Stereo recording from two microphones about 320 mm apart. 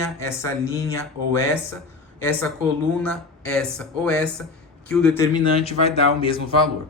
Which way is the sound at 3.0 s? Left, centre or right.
Centre.